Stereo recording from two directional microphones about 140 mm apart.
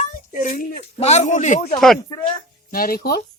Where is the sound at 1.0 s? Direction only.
50° left (ahead or behind).